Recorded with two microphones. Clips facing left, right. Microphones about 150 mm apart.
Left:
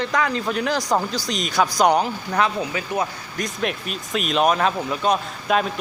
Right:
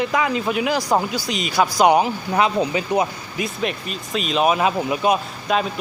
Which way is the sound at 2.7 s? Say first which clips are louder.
Right 4 dB; 20° right (ahead or behind).